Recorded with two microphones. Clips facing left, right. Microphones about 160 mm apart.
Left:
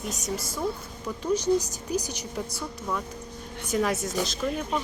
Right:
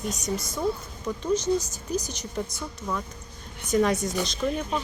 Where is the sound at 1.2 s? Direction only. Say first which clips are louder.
Left 1 dB; 10° left (ahead or behind).